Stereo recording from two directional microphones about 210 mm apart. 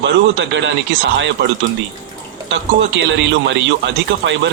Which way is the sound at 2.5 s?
60° right (ahead or behind).